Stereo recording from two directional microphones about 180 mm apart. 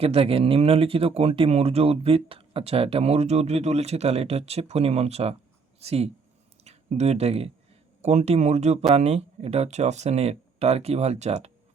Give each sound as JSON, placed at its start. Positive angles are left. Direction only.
{"t": 0.0, "sound": "speech", "side_deg": -30}